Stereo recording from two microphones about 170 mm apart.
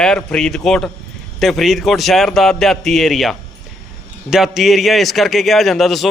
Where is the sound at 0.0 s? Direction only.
5° left (ahead or behind).